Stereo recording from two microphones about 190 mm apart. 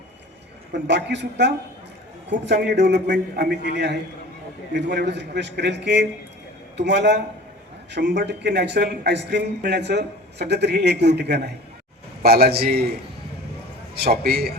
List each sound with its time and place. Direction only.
0.7 s a man's voice: 65° right (ahead or behind)